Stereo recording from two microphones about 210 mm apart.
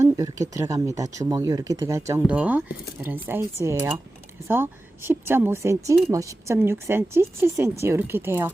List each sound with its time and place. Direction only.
0.0 s speech: 15° right (ahead or behind)